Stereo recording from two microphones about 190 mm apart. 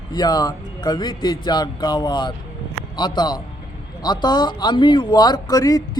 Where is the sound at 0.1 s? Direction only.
20° left (ahead or behind).